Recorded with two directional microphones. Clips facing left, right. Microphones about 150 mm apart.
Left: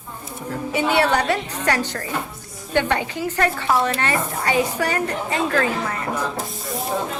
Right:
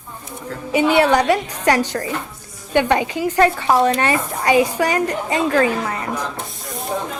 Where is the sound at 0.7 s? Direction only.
15° right (ahead or behind).